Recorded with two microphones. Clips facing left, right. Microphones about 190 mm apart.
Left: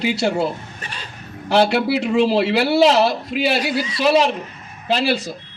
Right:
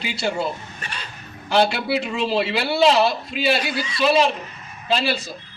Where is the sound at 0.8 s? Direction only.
40° left (ahead or behind).